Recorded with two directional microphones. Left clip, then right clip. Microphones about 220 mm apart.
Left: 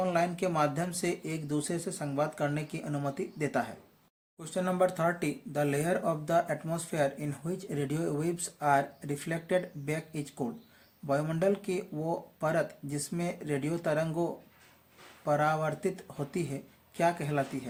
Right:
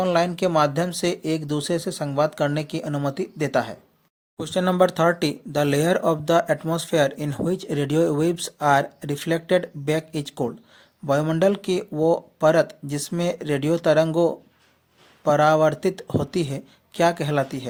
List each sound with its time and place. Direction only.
0.0 s speech: 45° right (ahead or behind)